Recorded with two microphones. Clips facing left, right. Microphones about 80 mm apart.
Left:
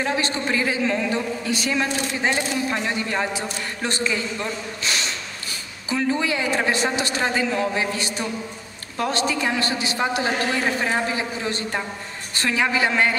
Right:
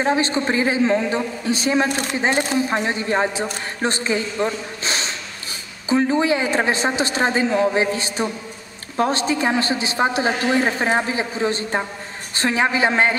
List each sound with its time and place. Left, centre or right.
0.0 s a woman's voice: right
1.9 s speech: right
2.7 s a woman's voice: right
4.5 s a sound: right
5.9 s a woman's voice: right